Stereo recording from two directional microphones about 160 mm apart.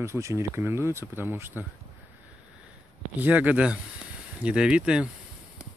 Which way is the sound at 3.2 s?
10° right (ahead or behind).